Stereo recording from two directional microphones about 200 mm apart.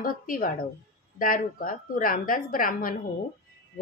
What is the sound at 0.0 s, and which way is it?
A woman's voice, 45° left (ahead or behind).